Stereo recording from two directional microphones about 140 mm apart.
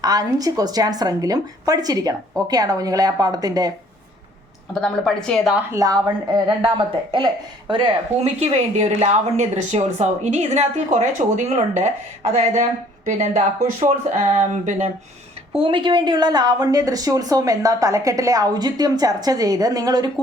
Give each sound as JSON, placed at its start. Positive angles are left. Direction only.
{"t": 0.0, "sound": "a woman's voice", "side_deg": -25}
{"t": 4.7, "sound": "a woman's voice", "side_deg": 5}
{"t": 5.7, "sound": "a woman's voice", "side_deg": -25}
{"t": 8.2, "sound": "speech", "side_deg": -50}
{"t": 15.5, "sound": "a woman's voice", "side_deg": -35}